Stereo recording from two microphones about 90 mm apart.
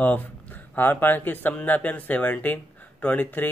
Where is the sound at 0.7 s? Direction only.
20° left (ahead or behind).